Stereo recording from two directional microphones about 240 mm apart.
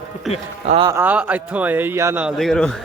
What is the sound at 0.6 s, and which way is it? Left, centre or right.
Speech, right.